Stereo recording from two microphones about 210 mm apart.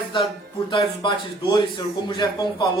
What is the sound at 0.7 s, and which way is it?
Speech, 20° left (ahead or behind).